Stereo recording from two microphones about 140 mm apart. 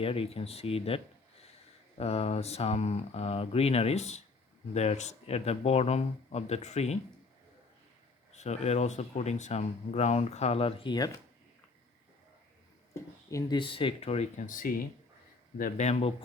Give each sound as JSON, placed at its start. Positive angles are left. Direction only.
{"t": 0.0, "sound": "speech", "side_deg": 40}
{"t": 8.3, "sound": "speech", "side_deg": 50}
{"t": 12.9, "sound": "a sound", "side_deg": 25}
{"t": 13.6, "sound": "speech", "side_deg": 40}
{"t": 15.9, "sound": "speech", "side_deg": 50}